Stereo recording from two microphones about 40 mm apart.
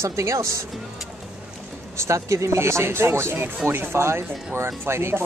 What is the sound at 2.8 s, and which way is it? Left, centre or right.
Speech, right.